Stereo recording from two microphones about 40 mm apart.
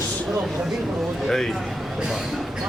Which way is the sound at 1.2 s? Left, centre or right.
Centre.